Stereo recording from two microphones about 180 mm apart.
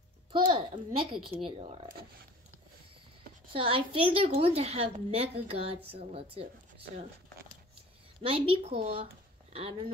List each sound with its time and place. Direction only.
0.3 s a child's voice: 25° right (ahead or behind)
3.5 s a woman's voice: 30° right (ahead or behind)
8.2 s speech: 30° right (ahead or behind)